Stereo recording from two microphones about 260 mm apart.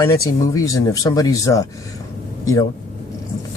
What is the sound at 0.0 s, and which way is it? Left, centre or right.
Speech, centre.